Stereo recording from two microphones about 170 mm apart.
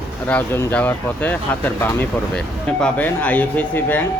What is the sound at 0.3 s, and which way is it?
Speech, 10° left (ahead or behind).